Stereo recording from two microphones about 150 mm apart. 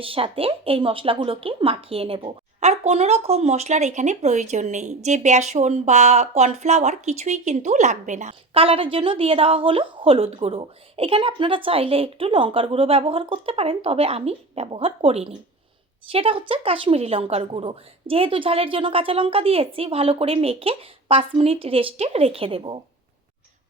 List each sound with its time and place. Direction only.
0.0 s a woman's voice: 40° right (ahead or behind)